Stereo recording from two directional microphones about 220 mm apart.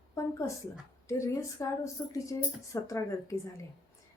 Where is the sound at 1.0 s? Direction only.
15° left (ahead or behind).